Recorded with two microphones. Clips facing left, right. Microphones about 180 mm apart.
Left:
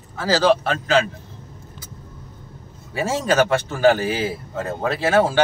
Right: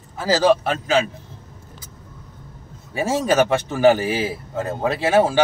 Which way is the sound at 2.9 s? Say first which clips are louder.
Right 1 dB; 10° right (ahead or behind).